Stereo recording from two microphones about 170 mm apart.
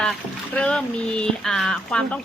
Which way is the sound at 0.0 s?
5° left (ahead or behind).